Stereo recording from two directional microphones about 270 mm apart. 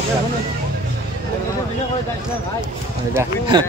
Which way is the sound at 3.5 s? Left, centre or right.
Centre.